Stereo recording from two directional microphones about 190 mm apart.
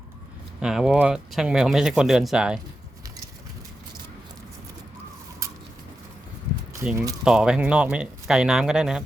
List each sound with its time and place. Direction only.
0.6 s speech: centre (ahead or behind)
6.9 s speech: 20° right (ahead or behind)
7.3 s speech: 5° right (ahead or behind)